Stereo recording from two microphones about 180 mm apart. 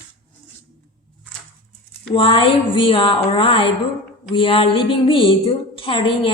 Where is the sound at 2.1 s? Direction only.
30° left (ahead or behind).